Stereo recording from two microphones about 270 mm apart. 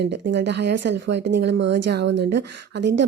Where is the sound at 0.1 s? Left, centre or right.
Right.